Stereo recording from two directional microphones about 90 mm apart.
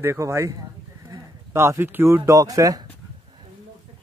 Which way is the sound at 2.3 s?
40° right (ahead or behind).